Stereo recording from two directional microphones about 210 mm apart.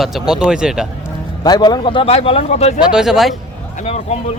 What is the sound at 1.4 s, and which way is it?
A man's voice, 20° left (ahead or behind).